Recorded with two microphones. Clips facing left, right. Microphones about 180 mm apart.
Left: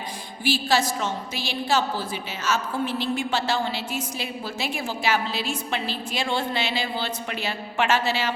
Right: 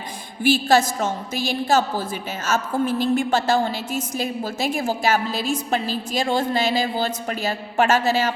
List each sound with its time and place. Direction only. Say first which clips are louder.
0.4 s a woman's voice: right 6 dB; 50° right (ahead or behind)